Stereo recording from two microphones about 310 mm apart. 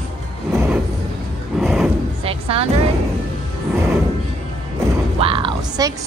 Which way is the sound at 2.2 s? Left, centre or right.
Centre.